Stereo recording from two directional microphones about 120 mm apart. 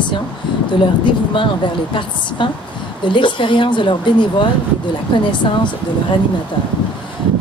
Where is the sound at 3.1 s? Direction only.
45° left (ahead or behind).